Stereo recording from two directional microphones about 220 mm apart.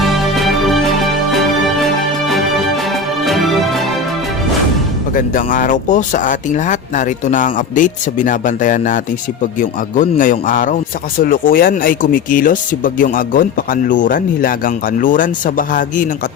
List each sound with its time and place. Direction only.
0.0 s music: centre (ahead or behind)
5.1 s speech: 35° left (ahead or behind)